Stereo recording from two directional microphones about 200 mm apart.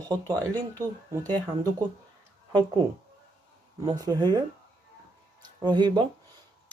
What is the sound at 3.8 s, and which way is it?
Speech, 20° right (ahead or behind).